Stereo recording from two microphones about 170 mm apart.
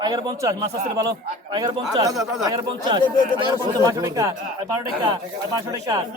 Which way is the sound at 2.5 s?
30° right (ahead or behind).